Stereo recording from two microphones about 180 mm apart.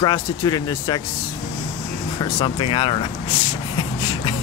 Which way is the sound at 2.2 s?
30° left (ahead or behind).